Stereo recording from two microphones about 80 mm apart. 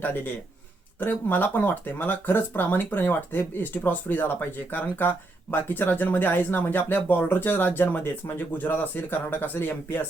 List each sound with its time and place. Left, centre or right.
0.0 s speech: left